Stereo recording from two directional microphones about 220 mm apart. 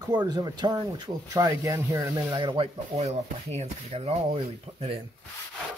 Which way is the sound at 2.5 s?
25° right (ahead or behind).